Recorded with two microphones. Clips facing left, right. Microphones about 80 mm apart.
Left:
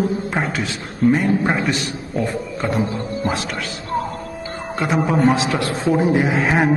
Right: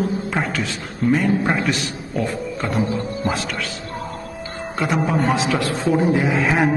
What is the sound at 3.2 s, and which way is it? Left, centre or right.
Speech, left.